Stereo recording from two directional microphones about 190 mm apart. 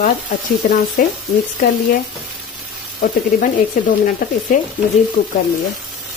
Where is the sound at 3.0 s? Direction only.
45° left (ahead or behind).